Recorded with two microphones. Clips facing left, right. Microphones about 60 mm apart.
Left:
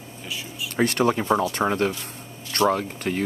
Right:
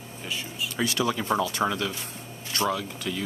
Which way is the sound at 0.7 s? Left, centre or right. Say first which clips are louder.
Left 6 dB; left.